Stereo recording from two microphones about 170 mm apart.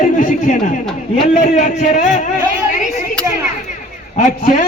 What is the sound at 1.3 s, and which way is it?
Speech, 50° left (ahead or behind).